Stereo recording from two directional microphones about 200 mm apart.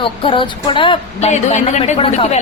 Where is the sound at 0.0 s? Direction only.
25° left (ahead or behind).